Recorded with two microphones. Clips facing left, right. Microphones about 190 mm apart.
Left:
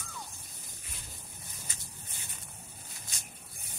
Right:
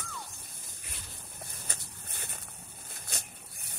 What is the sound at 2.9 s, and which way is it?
Vehicle, 60° right (ahead or behind).